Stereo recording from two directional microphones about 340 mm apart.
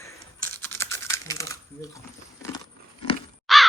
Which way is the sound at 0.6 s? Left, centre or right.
Centre.